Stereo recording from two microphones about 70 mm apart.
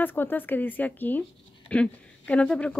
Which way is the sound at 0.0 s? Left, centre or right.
Left.